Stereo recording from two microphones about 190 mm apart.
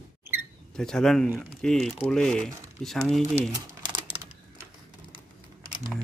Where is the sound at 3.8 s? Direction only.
25° right (ahead or behind).